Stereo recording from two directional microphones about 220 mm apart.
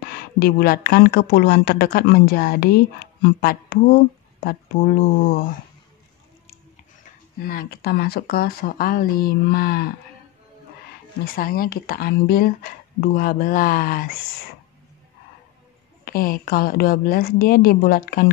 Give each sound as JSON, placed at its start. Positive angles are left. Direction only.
{"t": 0.0, "sound": "speech", "side_deg": 45}
{"t": 5.2, "sound": "speech", "side_deg": 40}
{"t": 7.4, "sound": "speech", "side_deg": 45}
{"t": 11.3, "sound": "speech", "side_deg": 40}
{"t": 16.1, "sound": "speech", "side_deg": 40}